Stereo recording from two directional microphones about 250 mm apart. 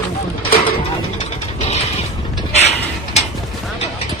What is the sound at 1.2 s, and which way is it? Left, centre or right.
Vehicle, left.